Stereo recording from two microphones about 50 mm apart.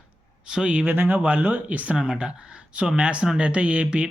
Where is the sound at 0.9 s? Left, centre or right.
Right.